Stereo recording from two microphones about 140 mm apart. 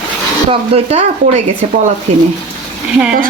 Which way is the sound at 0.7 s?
50° right (ahead or behind).